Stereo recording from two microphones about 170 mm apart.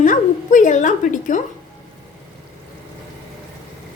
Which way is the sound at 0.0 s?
50° left (ahead or behind).